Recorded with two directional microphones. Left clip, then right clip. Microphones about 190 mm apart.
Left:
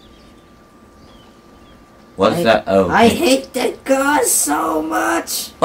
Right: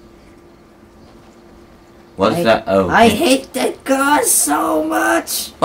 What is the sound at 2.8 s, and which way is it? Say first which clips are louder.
Speech: right 1 dB; 15° right (ahead or behind).